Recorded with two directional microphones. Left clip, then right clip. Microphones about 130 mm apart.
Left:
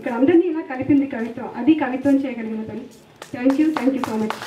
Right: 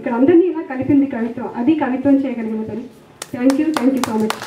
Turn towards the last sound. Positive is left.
turn(degrees=-40)  # may be behind; listen again after turning